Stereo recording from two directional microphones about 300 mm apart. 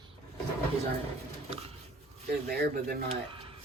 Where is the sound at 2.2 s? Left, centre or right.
Right.